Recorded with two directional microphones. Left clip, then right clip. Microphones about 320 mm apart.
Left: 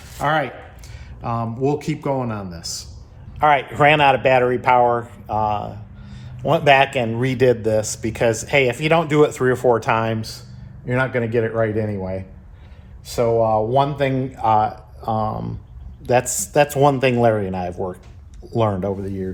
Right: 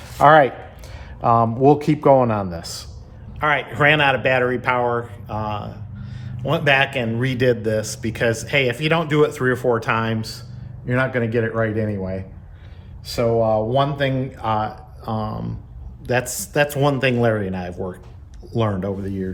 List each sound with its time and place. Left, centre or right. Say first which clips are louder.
0.2 s a man's voice: right 8 dB; right
3.3 s speech: left 4 dB; centre